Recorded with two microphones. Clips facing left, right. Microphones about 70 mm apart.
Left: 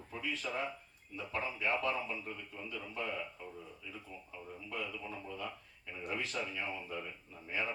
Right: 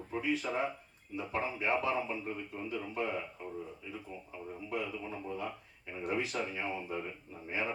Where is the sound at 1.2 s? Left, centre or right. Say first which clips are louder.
Right 3 dB; right.